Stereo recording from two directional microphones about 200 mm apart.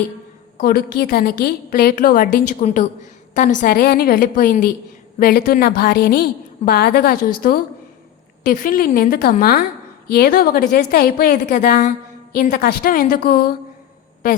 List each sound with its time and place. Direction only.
0.6 s a woman's voice: 50° left (ahead or behind)